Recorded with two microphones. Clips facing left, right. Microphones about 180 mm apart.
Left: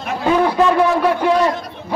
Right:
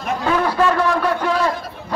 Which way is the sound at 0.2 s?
15° left (ahead or behind).